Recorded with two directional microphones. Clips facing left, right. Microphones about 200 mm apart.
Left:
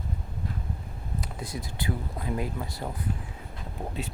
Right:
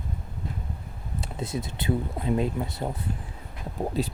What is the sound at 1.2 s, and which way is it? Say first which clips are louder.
Speech: right 7 dB; 25° right (ahead or behind).